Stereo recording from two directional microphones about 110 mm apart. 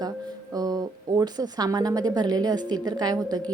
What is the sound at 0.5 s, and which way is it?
A woman's voice, 35° right (ahead or behind).